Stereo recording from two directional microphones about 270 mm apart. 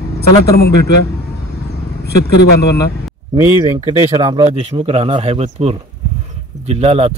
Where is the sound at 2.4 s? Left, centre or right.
Left.